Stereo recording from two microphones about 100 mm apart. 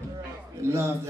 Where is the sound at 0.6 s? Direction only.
25° right (ahead or behind).